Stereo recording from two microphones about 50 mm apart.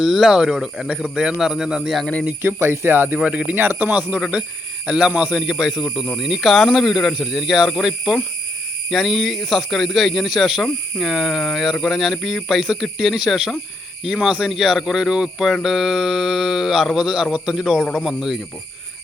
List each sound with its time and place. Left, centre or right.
0.0 s a man's voice: centre
1.4 s speech: centre
2.6 s speech: right
3.2 s a man's voice: right
3.5 s speech: right
4.2 s a man's voice: right; by 18.3 s centre